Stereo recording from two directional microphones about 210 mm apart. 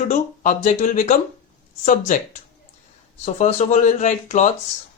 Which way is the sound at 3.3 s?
35° left (ahead or behind).